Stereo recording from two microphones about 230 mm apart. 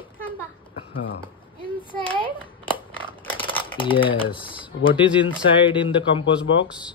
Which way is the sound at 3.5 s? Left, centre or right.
Left.